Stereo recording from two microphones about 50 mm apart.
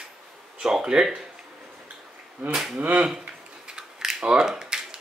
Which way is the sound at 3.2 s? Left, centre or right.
Centre.